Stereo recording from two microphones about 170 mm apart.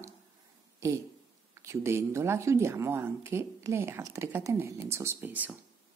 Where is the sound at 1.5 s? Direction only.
15° right (ahead or behind).